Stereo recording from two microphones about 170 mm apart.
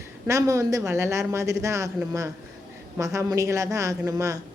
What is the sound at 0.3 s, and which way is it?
A woman's voice, 15° right (ahead or behind).